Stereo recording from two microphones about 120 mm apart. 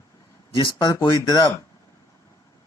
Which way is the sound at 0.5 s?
35° left (ahead or behind).